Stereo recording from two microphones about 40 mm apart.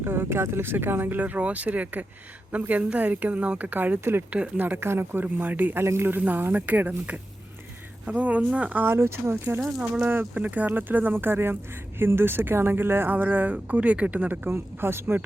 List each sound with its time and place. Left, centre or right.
0.0 s speech: right
1.2 s speech: right
4.8 s speech: right
5.2 s speech: right
5.7 s speech: right
6.1 s speech: right
8.7 s speech: right
9.6 s speech: centre
10.3 s speech: right
13.7 s speech: right
14.5 s speech: right